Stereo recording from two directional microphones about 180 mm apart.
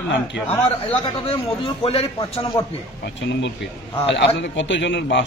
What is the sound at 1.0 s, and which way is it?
A man's voice, 30° left (ahead or behind).